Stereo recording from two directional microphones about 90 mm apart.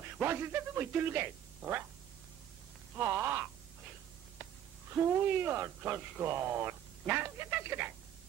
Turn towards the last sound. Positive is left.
turn(degrees=-25)  # may be behind; listen again after turning